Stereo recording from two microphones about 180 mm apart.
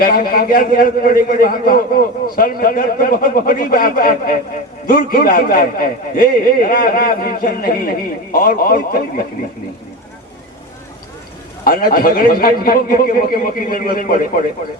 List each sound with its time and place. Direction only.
0.0 s a man's voice: 55° left (ahead or behind)
11.6 s a man's voice: 55° left (ahead or behind)